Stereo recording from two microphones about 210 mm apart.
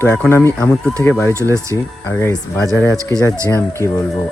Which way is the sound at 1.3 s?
15° right (ahead or behind).